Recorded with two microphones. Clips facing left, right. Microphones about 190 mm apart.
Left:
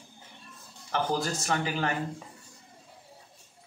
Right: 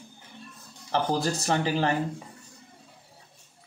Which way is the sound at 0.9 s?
35° right (ahead or behind).